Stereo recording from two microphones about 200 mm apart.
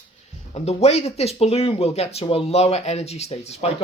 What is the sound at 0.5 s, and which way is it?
Speech, 30° left (ahead or behind).